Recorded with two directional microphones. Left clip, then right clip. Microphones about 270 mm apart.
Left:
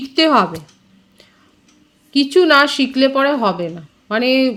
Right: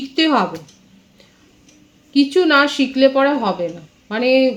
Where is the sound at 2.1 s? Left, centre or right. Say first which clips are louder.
Left 2 dB; left.